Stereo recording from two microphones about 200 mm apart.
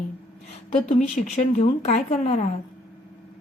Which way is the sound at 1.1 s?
30° left (ahead or behind).